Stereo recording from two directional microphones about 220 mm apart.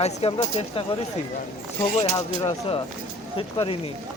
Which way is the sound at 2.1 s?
20° left (ahead or behind).